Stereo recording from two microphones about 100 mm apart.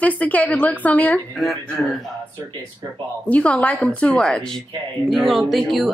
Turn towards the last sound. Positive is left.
turn(degrees=0)  # may be behind; listen again after turning